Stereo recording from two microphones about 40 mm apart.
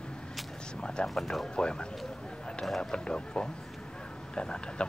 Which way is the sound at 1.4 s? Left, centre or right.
Left.